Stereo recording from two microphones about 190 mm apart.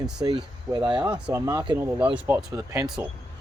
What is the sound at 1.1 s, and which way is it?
Speech, 5° right (ahead or behind).